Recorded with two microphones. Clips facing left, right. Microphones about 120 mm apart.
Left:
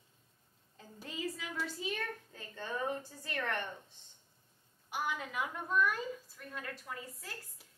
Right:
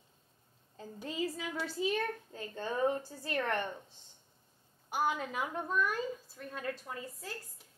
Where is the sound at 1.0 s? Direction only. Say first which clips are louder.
Right 4 dB; 35° right (ahead or behind).